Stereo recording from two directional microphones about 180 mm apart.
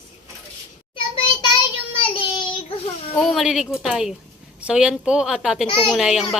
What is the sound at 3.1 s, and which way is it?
Speech, centre (ahead or behind).